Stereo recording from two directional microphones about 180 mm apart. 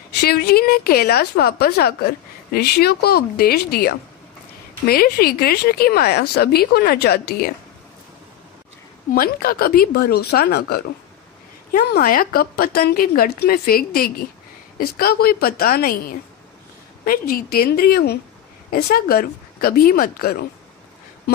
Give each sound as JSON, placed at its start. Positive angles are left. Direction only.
{"t": 0.2, "sound": "a woman's voice", "side_deg": 60}
{"t": 9.1, "sound": "a woman's voice", "side_deg": 55}